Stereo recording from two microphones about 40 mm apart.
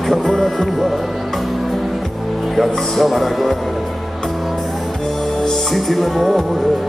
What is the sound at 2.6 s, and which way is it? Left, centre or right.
Music, centre.